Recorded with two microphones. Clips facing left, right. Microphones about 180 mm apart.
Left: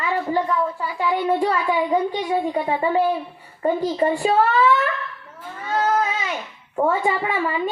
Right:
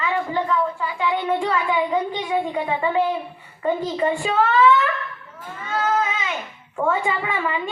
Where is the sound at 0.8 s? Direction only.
40° left (ahead or behind).